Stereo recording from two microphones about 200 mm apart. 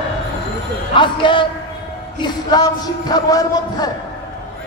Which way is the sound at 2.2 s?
20° left (ahead or behind).